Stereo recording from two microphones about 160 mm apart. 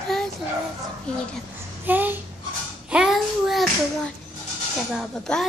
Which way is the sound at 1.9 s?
10° right (ahead or behind).